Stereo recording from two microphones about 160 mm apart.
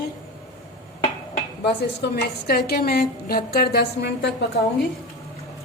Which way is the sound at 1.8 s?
85° left.